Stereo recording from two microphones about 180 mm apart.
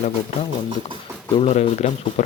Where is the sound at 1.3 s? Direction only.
35° left (ahead or behind).